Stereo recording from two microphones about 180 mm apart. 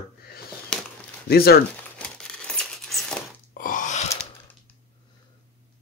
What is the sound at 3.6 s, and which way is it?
Gasp, 45° left (ahead or behind).